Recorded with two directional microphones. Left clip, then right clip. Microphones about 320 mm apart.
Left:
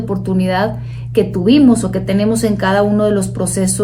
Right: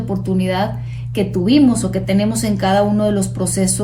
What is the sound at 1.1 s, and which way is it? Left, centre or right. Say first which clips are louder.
A woman's voice: left 3 dB; centre.